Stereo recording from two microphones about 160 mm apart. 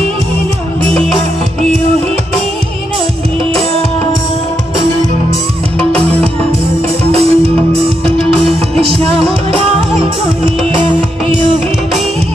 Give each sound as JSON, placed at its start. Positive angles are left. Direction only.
{"t": 7.1, "sound": "music", "side_deg": -40}